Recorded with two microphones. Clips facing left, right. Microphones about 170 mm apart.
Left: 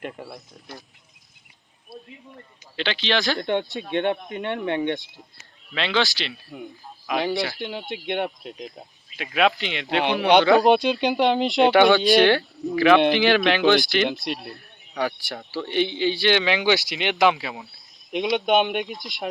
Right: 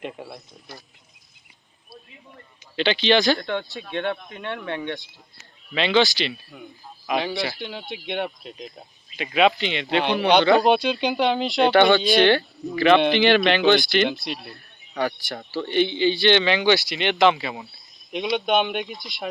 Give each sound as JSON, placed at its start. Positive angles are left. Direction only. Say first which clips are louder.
{"t": 0.0, "sound": "speech", "louder": "even", "side_deg": 0}
{"t": 2.7, "sound": "speech", "louder": "right 5 dB", "side_deg": 0}
{"t": 3.4, "sound": "speech", "louder": "left 4 dB", "side_deg": 20}
{"t": 5.7, "sound": "speech", "louder": "right 4 dB", "side_deg": 0}
{"t": 7.6, "sound": "speech", "louder": "left 3 dB", "side_deg": 15}
{"t": 7.9, "sound": "speech", "louder": "left 1 dB", "side_deg": 0}